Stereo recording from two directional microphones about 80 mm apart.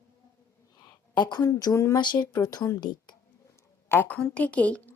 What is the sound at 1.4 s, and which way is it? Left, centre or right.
Speech, left.